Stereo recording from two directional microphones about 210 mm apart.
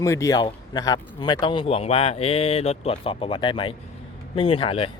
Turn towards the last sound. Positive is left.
turn(degrees=25)  # may be behind; listen again after turning